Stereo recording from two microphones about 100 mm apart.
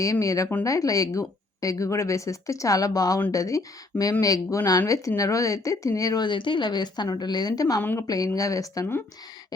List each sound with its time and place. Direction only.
0.0 s a woman's voice: 35° left (ahead or behind)
6.2 s a woman's voice: 55° left (ahead or behind); by 7.8 s 40° left (ahead or behind)
7.8 s a woman's voice: 20° left (ahead or behind)
8.0 s a woman's voice: 35° left (ahead or behind)